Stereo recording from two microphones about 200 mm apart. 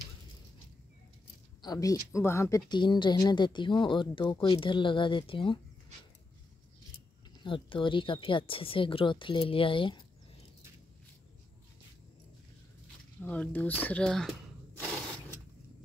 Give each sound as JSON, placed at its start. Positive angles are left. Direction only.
{"t": 1.6, "sound": "speech", "side_deg": 20}
{"t": 7.4, "sound": "speech", "side_deg": 25}
{"t": 13.2, "sound": "speech", "side_deg": 10}